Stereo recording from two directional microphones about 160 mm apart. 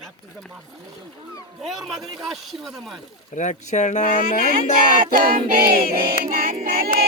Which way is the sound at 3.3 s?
50° left (ahead or behind).